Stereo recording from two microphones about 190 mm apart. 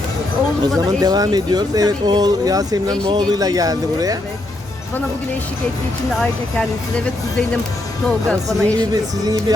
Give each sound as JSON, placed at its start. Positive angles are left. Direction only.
{"t": 0.9, "sound": "speech", "side_deg": -20}
{"t": 6.1, "sound": "speech", "side_deg": 5}
{"t": 8.8, "sound": "speech", "side_deg": -20}